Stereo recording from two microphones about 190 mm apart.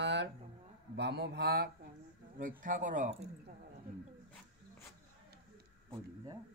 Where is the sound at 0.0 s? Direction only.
65° right (ahead or behind).